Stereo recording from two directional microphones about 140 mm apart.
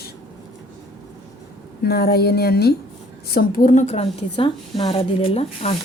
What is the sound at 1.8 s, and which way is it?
A woman's voice, 90° left.